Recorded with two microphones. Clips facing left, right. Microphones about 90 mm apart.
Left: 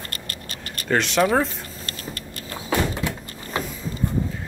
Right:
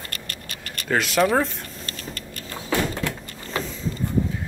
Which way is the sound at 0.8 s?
5° right (ahead or behind).